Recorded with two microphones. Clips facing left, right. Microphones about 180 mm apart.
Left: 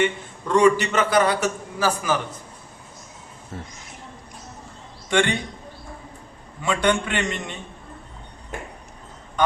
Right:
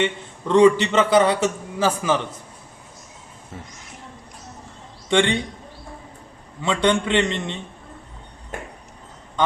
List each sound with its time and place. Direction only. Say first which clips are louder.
0.0 s a man's voice: left 1 dB; 25° right (ahead or behind)
5.0 s a man's voice: right 2 dB; 25° right (ahead or behind)
6.6 s a man's voice: right 2 dB; 25° right (ahead or behind)